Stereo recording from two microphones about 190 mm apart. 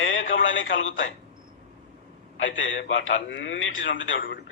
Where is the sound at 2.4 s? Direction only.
90° left.